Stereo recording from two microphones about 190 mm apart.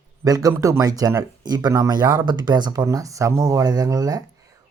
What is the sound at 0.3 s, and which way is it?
Speech, 20° right (ahead or behind).